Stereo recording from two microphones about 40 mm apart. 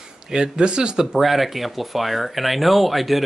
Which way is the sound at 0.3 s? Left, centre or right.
Centre.